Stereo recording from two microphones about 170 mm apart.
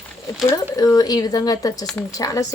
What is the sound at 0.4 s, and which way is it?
A woman's voice, 20° left (ahead or behind).